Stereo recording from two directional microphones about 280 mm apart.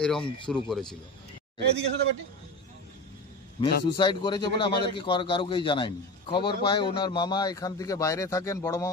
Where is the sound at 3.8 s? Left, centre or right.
Centre.